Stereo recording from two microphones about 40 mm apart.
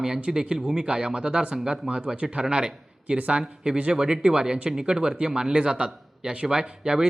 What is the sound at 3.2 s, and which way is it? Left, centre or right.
Speech, right.